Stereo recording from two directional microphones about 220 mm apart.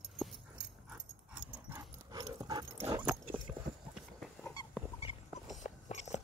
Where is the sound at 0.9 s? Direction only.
5° right (ahead or behind).